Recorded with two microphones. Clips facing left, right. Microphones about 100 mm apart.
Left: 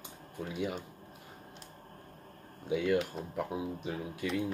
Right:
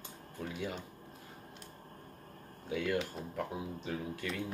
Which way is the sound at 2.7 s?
15° left (ahead or behind).